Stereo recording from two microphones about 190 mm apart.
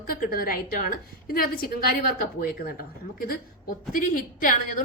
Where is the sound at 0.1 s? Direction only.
50° left (ahead or behind).